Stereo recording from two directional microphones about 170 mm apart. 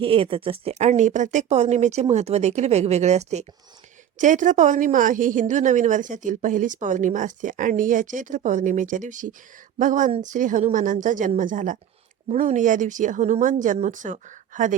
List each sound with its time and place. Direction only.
0.0 s a woman's voice: 30° right (ahead or behind); by 14.8 s 50° right (ahead or behind)